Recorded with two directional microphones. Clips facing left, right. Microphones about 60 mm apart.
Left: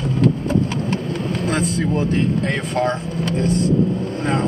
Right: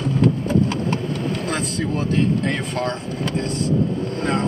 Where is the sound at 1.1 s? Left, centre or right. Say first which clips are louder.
Left 2 dB; centre.